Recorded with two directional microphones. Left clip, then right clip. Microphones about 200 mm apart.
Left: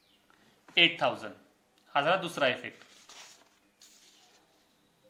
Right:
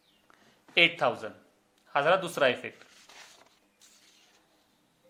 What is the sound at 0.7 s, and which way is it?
Speech, 35° right (ahead or behind).